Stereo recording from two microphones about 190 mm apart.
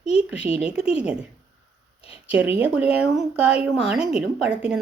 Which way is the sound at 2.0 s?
30° left (ahead or behind).